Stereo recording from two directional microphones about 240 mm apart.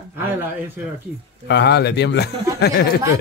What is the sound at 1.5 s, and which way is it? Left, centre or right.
A man's voice, left.